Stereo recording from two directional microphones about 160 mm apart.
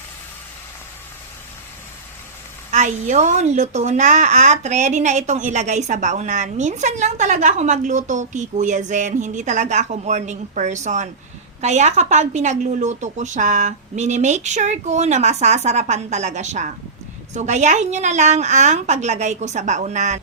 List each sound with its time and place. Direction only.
2.7 s speech: 50° right (ahead or behind)